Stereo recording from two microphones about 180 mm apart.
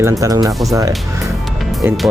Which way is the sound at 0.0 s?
20° right (ahead or behind).